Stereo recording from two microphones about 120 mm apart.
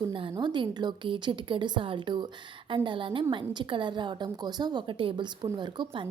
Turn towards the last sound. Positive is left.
turn(degrees=-40)  # may be behind; listen again after turning